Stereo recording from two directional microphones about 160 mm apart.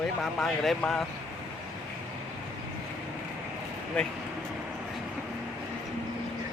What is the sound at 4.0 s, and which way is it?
Speech, 5° left (ahead or behind).